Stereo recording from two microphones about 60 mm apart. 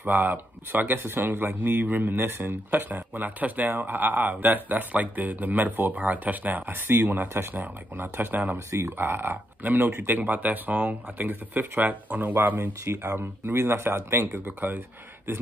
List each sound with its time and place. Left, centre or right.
0.0 s speech: right
8.6 s speech: right
12.5 s speech: right
14.3 s speech: right